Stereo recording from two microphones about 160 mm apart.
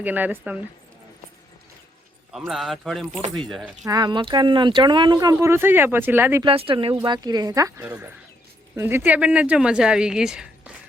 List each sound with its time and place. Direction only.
0.0 s speech: 10° right (ahead or behind)
2.5 s speech: centre (ahead or behind)
3.8 s speech: 25° right (ahead or behind)
6.4 s speech: 35° right (ahead or behind); by 10.7 s 5° right (ahead or behind)